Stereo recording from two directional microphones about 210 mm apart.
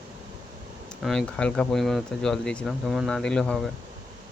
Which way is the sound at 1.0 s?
5° left (ahead or behind).